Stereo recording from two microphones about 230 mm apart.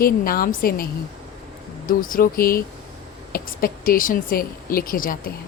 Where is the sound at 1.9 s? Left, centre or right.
Left.